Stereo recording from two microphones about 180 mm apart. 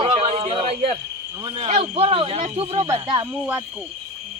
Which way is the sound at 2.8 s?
20° right (ahead or behind).